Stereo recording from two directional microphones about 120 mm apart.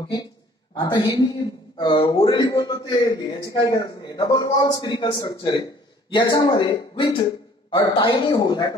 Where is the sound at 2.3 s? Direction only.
30° left (ahead or behind).